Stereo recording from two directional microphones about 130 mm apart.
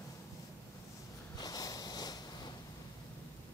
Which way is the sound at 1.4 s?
30° left (ahead or behind).